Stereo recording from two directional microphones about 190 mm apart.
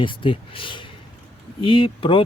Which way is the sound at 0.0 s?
25° left (ahead or behind).